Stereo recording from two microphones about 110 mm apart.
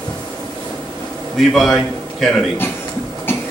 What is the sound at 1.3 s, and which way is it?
A man's voice, centre (ahead or behind).